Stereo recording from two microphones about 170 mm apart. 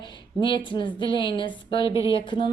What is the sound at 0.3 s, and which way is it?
A woman's voice, 30° left (ahead or behind).